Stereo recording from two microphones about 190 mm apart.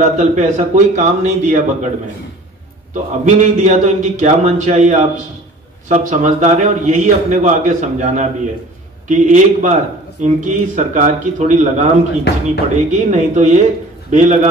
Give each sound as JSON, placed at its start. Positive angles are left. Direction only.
{"t": 0.0, "sound": "a man's voice", "side_deg": -40}
{"t": 2.9, "sound": "a man's voice", "side_deg": -40}
{"t": 12.3, "sound": "speech", "side_deg": 60}
{"t": 12.9, "sound": "a man's voice", "side_deg": -40}